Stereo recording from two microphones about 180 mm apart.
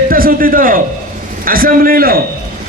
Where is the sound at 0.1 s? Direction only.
55° right (ahead or behind).